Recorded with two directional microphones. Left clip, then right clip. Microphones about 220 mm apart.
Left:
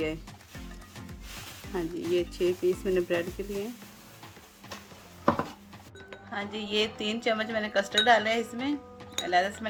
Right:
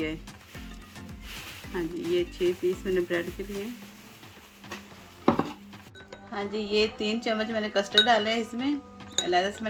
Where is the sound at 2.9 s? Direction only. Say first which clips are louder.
Even; 50° left (ahead or behind).